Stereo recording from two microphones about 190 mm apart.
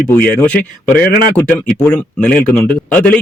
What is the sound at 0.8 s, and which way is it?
Speech, 50° left (ahead or behind).